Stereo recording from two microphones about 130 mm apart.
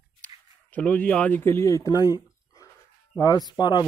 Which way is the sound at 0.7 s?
10° left (ahead or behind).